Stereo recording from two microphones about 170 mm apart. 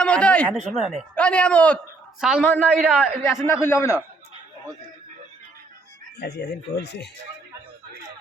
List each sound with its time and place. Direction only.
0.0 s a man's voice: 5° left (ahead or behind)
6.1 s speech: 75° left (ahead or behind)